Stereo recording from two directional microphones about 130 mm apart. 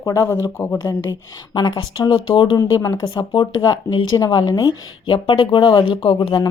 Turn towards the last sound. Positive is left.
turn(degrees=35)  # may be behind; listen again after turning